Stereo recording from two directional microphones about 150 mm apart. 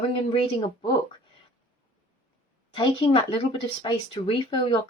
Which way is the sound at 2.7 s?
35° left (ahead or behind).